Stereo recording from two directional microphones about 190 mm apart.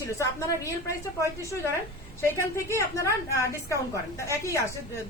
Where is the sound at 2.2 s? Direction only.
15° left (ahead or behind).